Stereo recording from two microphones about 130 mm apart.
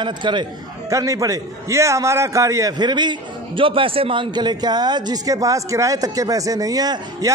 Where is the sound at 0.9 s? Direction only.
25° right (ahead or behind).